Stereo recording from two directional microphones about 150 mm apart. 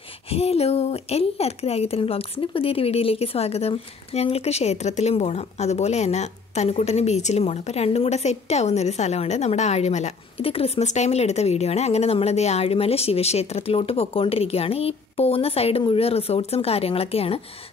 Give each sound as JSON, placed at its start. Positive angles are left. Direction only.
{"t": 0.3, "sound": "speech", "side_deg": 45}